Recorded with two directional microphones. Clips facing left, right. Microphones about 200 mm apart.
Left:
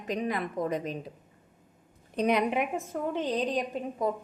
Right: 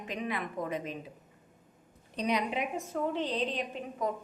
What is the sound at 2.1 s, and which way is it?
A woman's voice, 55° left (ahead or behind).